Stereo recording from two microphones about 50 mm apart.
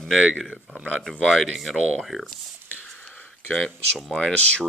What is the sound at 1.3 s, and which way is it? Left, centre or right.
Speech, centre.